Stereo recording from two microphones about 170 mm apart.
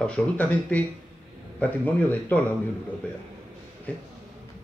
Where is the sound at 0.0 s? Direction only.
10° left (ahead or behind).